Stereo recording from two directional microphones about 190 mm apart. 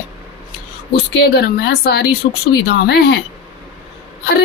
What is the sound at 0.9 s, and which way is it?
Speech, 60° left (ahead or behind).